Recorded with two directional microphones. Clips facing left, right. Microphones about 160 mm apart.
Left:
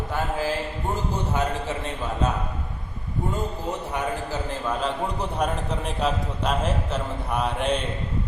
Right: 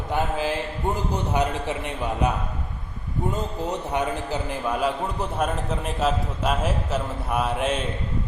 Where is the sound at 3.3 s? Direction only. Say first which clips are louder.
Right 1 dB; 20° right (ahead or behind); by 7.8 s 5° right (ahead or behind).